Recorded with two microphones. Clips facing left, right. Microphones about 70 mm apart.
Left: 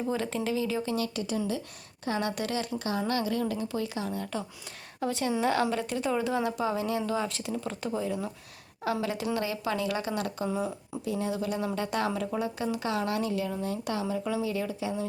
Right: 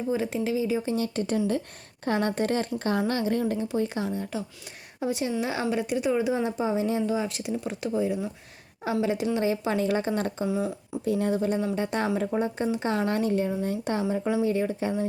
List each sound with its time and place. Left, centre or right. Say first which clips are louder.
0.1 s speech: right 5 dB; centre
0.9 s speech: right 4 dB; right
4.1 s a woman's voice: right 2 dB; centre
7.1 s speech: right 3 dB; centre
8.8 s speech: right 4 dB; right
10.4 s speech: right 2 dB; right
11.0 s speech: right 6 dB; right
11.3 s speech: right 4 dB; right
12.9 s speech: right 4 dB; right